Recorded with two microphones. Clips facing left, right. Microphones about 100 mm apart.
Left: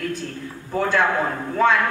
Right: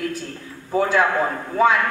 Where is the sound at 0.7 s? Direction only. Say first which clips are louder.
Right 2 dB; 5° right (ahead or behind).